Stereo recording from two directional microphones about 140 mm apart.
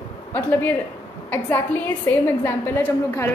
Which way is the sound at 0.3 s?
15° left (ahead or behind).